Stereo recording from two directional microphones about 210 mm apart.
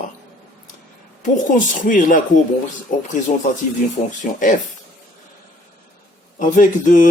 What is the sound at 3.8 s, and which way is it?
Speech, 40° left (ahead or behind).